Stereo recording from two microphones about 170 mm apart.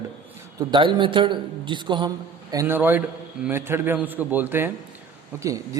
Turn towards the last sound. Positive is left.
turn(degrees=-15)  # may be behind; listen again after turning